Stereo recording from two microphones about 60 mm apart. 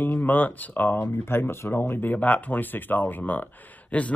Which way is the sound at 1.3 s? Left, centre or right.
Left.